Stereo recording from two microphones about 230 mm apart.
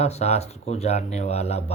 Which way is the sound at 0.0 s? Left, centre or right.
Left.